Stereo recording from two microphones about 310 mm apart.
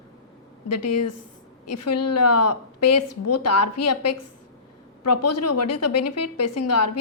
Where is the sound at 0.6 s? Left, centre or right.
Left.